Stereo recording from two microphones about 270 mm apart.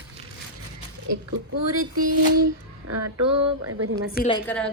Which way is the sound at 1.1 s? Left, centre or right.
Right.